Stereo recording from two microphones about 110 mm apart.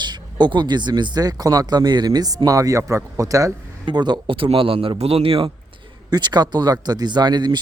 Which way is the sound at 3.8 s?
40° right (ahead or behind).